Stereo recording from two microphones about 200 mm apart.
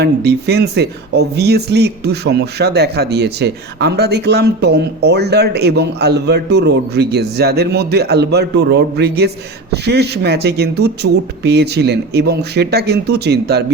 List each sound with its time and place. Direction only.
0.0 s speech: 55° right (ahead or behind)